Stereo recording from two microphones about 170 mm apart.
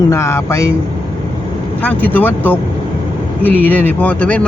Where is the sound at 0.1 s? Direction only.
15° left (ahead or behind).